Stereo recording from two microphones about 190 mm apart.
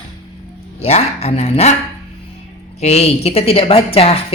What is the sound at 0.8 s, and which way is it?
Speech, 35° left (ahead or behind).